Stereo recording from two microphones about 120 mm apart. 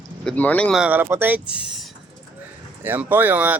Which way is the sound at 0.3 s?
10° left (ahead or behind).